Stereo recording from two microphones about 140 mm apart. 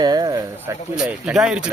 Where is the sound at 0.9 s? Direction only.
5° right (ahead or behind).